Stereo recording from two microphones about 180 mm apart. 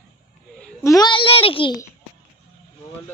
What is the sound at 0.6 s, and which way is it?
A child's voice, 15° left (ahead or behind).